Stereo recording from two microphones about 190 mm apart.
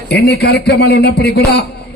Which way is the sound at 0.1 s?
60° left (ahead or behind).